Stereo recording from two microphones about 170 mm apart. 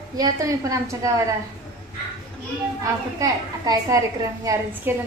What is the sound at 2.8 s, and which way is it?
A woman's voice, 20° right (ahead or behind).